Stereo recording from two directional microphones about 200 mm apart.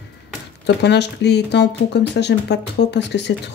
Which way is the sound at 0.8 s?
55° left (ahead or behind).